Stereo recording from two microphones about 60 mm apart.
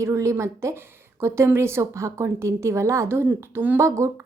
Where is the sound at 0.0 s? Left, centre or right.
Right.